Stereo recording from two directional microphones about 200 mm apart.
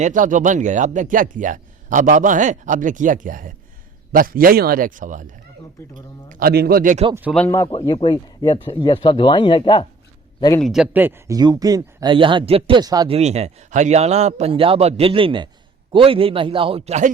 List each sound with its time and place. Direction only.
0.0 s a man's voice: 40° right (ahead or behind)
7.1 s speech: 10° right (ahead or behind)
7.3 s speech: 10° left (ahead or behind)
7.7 s speech: 25° left (ahead or behind)
10.6 s speech: centre (ahead or behind); by 13.1 s 20° right (ahead or behind)
13.1 s speech: 30° right (ahead or behind)